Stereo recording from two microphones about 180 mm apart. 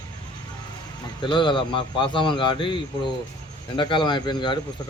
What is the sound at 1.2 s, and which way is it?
A man's voice, 25° left (ahead or behind).